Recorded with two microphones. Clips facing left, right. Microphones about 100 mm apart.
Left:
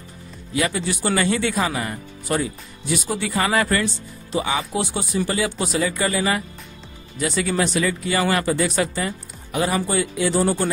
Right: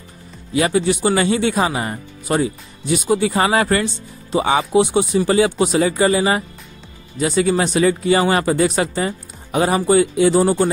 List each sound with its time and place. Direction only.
0.6 s speech: 30° right (ahead or behind)